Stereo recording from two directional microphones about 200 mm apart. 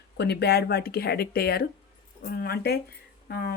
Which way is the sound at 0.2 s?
55° left (ahead or behind).